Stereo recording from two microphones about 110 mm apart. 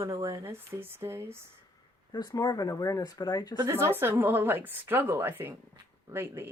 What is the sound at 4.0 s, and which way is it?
Speech, 20° right (ahead or behind).